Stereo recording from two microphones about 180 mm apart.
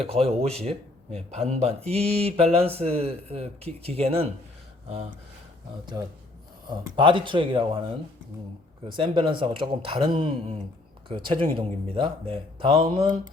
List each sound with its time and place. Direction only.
0.1 s speech: 35° right (ahead or behind)
6.0 s speech: 20° right (ahead or behind)
8.9 s speech: 25° right (ahead or behind)